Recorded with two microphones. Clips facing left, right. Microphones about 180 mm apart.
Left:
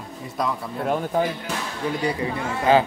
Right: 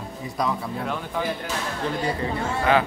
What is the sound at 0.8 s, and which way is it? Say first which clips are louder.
Speech: left 9 dB; 45° left (ahead or behind).